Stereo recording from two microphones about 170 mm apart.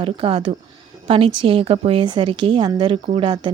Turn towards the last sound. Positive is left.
turn(degrees=-30)  # may be behind; listen again after turning